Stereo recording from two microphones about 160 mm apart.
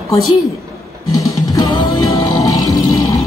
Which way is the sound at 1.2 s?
20° left (ahead or behind).